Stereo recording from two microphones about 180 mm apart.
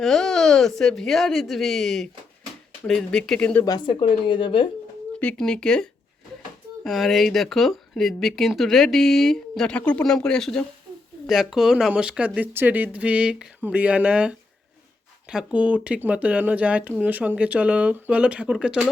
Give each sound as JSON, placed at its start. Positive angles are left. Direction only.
{"t": 0.0, "sound": "speech", "side_deg": 0}
{"t": 3.7, "sound": "speech", "side_deg": 25}
{"t": 5.2, "sound": "speech", "side_deg": 5}